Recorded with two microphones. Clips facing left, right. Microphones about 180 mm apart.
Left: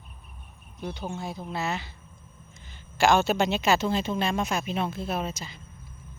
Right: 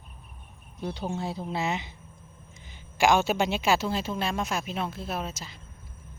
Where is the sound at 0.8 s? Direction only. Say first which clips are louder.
Right 2 dB; 30° right (ahead or behind).